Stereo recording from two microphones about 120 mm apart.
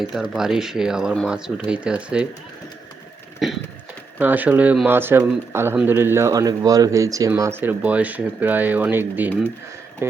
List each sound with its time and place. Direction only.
0.0 s speech: 5° right (ahead or behind)
3.4 s speech: centre (ahead or behind)
4.2 s speech: 15° right (ahead or behind)